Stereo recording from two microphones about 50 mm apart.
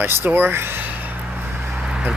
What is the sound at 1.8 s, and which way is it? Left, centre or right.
Vehicle, centre.